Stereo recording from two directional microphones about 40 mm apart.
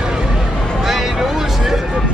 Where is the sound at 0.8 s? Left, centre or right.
Centre.